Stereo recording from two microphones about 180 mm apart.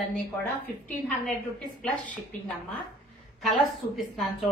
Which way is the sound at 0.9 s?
5° left (ahead or behind).